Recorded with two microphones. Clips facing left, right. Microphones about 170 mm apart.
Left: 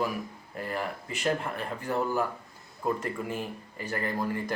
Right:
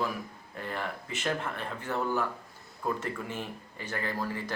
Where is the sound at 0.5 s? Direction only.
5° left (ahead or behind).